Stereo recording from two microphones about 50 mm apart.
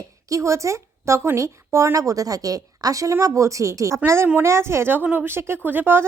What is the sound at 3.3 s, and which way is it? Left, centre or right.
Speech, right.